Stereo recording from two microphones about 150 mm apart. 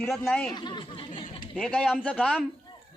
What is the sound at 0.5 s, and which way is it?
Speech, 30° left (ahead or behind).